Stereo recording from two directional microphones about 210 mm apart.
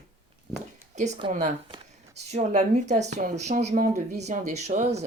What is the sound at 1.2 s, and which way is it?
Speech, 25° right (ahead or behind).